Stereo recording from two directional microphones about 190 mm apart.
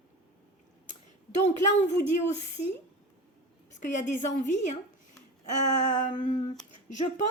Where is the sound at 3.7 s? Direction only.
40° left (ahead or behind).